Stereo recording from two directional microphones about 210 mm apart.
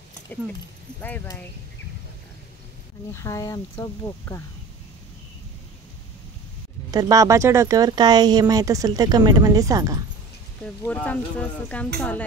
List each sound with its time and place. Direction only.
1.0 s speech: 10° left (ahead or behind)
3.1 s speech: 15° left (ahead or behind)
6.9 s speech: 15° right (ahead or behind)
10.9 s speech: 5° left (ahead or behind)